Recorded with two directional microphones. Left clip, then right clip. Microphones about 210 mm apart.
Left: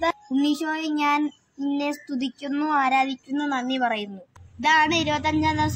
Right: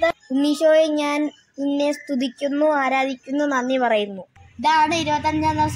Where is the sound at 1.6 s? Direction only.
45° right (ahead or behind).